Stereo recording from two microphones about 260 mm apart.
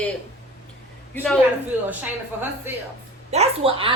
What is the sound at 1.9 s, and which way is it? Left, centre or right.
Speech, centre.